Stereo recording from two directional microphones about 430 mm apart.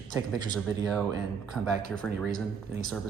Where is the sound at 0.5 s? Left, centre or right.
Centre.